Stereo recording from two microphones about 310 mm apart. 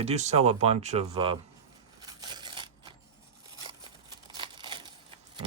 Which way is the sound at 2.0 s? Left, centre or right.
Centre.